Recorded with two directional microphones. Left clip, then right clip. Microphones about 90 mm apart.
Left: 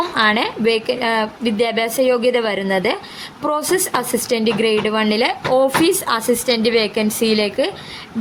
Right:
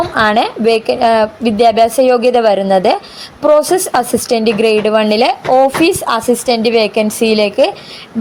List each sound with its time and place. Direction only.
0.2 s a woman's voice: 30° right (ahead or behind)